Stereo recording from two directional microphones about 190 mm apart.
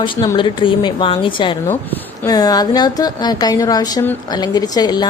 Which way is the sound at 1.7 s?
15° left (ahead or behind).